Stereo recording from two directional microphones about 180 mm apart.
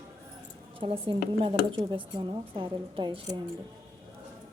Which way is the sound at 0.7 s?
30° right (ahead or behind).